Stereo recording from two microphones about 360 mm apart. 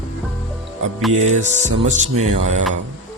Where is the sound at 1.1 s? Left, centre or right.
Centre.